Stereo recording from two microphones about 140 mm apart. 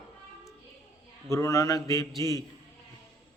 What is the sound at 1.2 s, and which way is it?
A man's voice, 20° left (ahead or behind).